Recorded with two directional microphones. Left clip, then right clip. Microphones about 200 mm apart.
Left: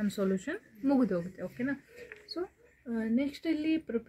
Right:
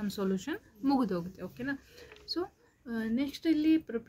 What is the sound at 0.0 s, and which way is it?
Speech, 25° right (ahead or behind).